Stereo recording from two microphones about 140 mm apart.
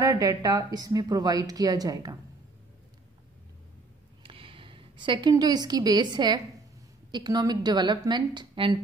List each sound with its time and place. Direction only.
0.0 s a woman's voice: 25° right (ahead or behind)
4.2 s a sound: 40° right (ahead or behind)
5.3 s a woman's voice: 30° right (ahead or behind)